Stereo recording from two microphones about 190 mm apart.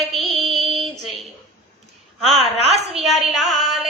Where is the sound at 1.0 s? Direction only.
Centre (ahead or behind).